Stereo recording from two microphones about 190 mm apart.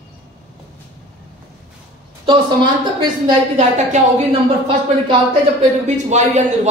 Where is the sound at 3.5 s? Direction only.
35° right (ahead or behind).